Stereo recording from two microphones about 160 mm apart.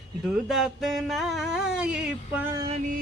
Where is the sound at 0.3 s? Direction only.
Centre (ahead or behind).